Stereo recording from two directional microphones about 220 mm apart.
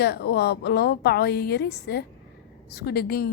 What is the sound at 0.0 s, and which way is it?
A woman's voice, 45° left (ahead or behind).